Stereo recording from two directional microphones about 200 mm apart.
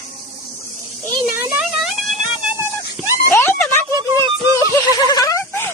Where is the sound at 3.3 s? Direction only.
10° left (ahead or behind).